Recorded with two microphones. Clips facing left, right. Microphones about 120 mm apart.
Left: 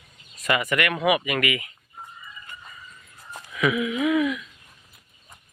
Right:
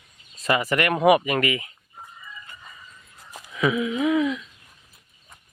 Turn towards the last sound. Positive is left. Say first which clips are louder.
# right 1 dB
turn(degrees=-25)  # may be behind; listen again after turning